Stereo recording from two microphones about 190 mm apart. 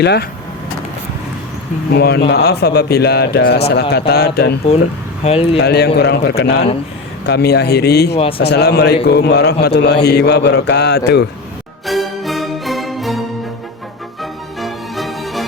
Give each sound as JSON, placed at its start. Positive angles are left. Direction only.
{"t": 0.0, "sound": "speech", "side_deg": 60}
{"t": 1.9, "sound": "speech", "side_deg": 60}
{"t": 5.2, "sound": "speech", "side_deg": 30}
{"t": 5.5, "sound": "speech", "side_deg": 60}
{"t": 8.1, "sound": "speech", "side_deg": 30}
{"t": 8.4, "sound": "speech", "side_deg": 60}
{"t": 11.9, "sound": "music", "side_deg": 0}